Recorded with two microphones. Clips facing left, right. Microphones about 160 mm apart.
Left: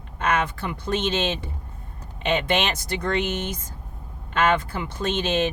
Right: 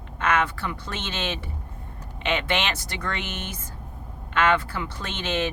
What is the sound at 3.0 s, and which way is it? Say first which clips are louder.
Speech: left 8 dB; 20° left (ahead or behind).